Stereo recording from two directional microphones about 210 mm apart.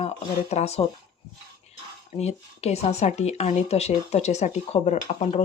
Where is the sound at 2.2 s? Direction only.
30° left (ahead or behind).